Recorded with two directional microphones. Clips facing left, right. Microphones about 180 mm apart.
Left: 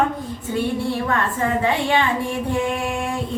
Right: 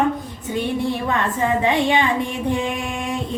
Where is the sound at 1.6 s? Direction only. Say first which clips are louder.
Right 1 dB; 20° right (ahead or behind).